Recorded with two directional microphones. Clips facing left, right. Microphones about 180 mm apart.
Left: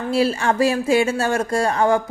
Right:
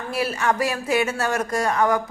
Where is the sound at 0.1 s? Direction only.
30° left (ahead or behind).